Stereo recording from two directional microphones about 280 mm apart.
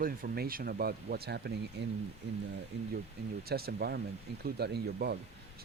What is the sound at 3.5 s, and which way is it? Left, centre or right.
Speech, right.